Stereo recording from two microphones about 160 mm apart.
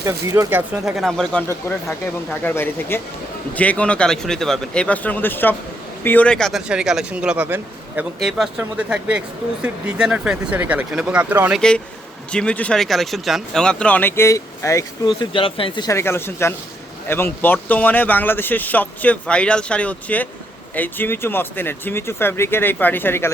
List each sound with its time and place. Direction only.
0.0 s speech: 20° right (ahead or behind)
0.5 s speech: 5° right (ahead or behind)
1.5 s speech: 15° left (ahead or behind); by 11.6 s 10° right (ahead or behind)
12.3 s speech: 5° left (ahead or behind); by 15.9 s 30° left (ahead or behind)
15.9 s speech: 15° left (ahead or behind)